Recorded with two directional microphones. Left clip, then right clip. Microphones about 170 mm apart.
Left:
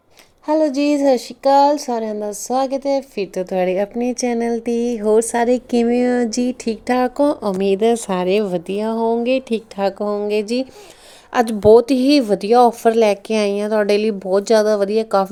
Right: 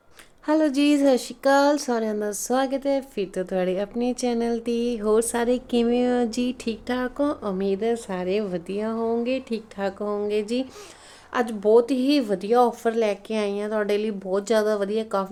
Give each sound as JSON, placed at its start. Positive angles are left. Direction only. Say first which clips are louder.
{"t": 0.9, "sound": "speech", "louder": "left 5 dB", "side_deg": 10}
{"t": 2.6, "sound": "speech", "louder": "left 5 dB", "side_deg": -25}
{"t": 3.2, "sound": "a woman's voice", "louder": "left 6 dB", "side_deg": 20}
{"t": 11.3, "sound": "speech", "louder": "left 9 dB", "side_deg": 40}